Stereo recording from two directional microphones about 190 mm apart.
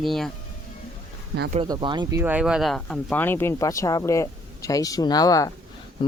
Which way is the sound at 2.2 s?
10° right (ahead or behind).